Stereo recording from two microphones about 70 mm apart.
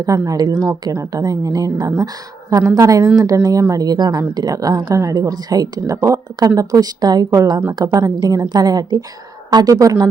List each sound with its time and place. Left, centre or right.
0.0 s speech: right
0.4 s a woman's voice: right
0.7 s speech: right
1.1 s speech: right
2.5 s speech: right
4.4 s a woman's voice: right
4.9 s speech: right
5.5 s a woman's voice: right
6.0 s a woman's voice: right
9.7 s speech: right